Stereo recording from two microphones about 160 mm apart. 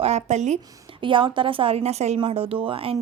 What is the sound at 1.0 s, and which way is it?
A woman's voice, 30° right (ahead or behind).